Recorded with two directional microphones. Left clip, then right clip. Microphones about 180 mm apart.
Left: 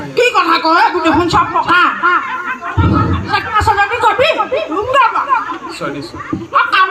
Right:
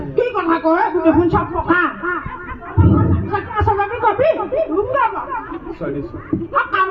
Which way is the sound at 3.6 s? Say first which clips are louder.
Left 5 dB; 40° left (ahead or behind).